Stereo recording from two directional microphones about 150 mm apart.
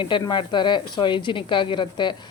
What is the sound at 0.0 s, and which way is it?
A woman's voice, 30° left (ahead or behind).